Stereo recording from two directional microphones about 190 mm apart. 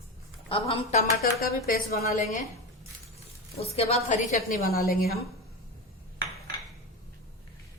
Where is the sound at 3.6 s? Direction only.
35° left (ahead or behind); by 5.2 s 50° left (ahead or behind).